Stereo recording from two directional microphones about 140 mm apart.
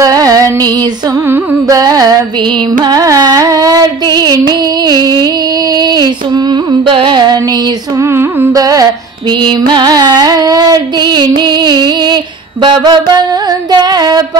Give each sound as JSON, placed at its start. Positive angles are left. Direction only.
{"t": 0.0, "sound": "music", "side_deg": -25}
{"t": 1.3, "sound": "carnatic music", "side_deg": -25}
{"t": 6.9, "sound": "music", "side_deg": -35}
{"t": 8.0, "sound": "carnatic music", "side_deg": -20}
{"t": 12.6, "sound": "music", "side_deg": -30}